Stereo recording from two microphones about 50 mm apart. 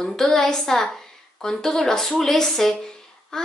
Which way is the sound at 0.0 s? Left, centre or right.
Centre.